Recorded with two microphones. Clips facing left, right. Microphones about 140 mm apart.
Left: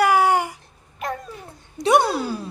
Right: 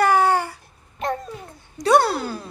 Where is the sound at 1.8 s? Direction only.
15° left (ahead or behind).